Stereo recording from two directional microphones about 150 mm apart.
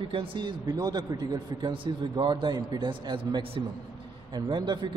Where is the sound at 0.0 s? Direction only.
35° right (ahead or behind).